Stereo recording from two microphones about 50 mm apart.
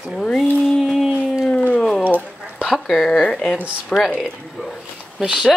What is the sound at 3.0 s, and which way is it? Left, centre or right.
A woman's voice, centre.